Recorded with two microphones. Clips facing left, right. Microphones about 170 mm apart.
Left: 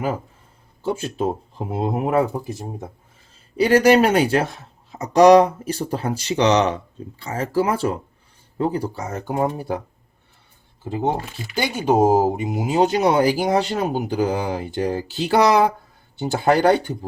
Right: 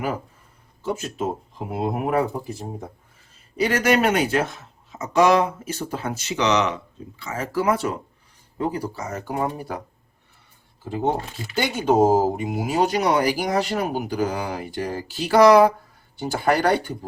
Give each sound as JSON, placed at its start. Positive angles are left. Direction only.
{"t": 0.8, "sound": "speech", "side_deg": 30}
{"t": 3.6, "sound": "speech", "side_deg": 35}
{"t": 10.8, "sound": "speech", "side_deg": 20}